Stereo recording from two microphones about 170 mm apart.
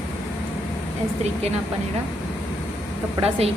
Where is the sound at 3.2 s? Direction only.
35° right (ahead or behind).